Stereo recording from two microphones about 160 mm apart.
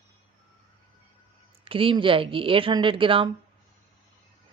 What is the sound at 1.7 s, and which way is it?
Speech, 35° right (ahead or behind).